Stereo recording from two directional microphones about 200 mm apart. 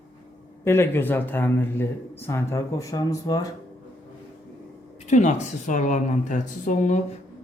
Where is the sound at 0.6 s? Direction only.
10° left (ahead or behind).